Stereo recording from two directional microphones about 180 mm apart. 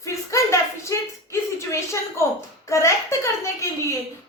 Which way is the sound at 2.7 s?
15° left (ahead or behind).